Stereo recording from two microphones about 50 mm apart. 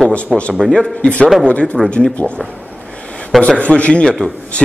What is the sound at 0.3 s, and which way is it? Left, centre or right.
Speech, centre.